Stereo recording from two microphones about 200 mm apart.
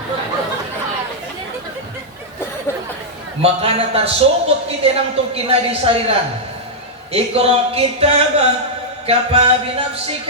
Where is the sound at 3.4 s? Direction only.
30° right (ahead or behind).